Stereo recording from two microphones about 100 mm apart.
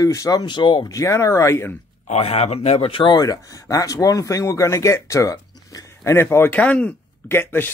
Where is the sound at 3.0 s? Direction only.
40° left (ahead or behind).